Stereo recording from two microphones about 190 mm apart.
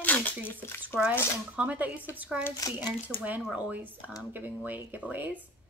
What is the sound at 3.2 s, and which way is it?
Speech, 5° right (ahead or behind).